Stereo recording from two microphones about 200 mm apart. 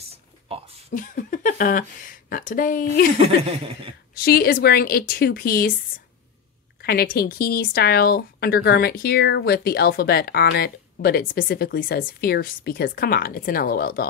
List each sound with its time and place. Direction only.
0.0 s a sound: 30° right (ahead or behind)
0.8 s speech: 40° left (ahead or behind)
3.2 s chuckle: 30° right (ahead or behind)
4.1 s speech: 50° left (ahead or behind)
6.8 s speech: 50° left (ahead or behind)